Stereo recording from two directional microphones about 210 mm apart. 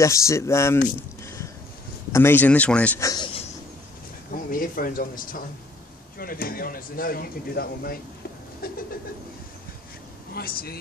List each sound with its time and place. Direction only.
0.0 s speech: 15° left (ahead or behind)
1.2 s a sound: 15° left (ahead or behind)
2.1 s speech: 10° left (ahead or behind)
3.1 s a sound: 20° left (ahead or behind)
4.3 s speech: 40° left (ahead or behind)
10.3 s speech: 45° left (ahead or behind)